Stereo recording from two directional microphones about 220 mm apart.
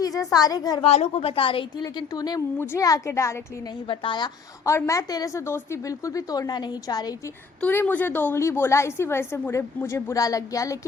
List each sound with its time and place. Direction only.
0.2 s a woman's voice: 15° left (ahead or behind)